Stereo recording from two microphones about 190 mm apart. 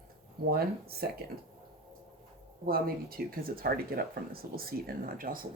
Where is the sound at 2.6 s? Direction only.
50° right (ahead or behind).